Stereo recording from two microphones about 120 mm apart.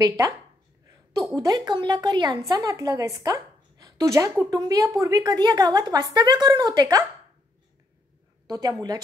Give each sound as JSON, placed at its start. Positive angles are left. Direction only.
{"t": 1.3, "sound": "a woman's voice", "side_deg": -30}
{"t": 8.5, "sound": "a woman's voice", "side_deg": -30}